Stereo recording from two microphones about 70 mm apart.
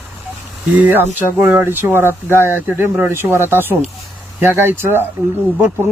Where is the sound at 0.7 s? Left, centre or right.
Right.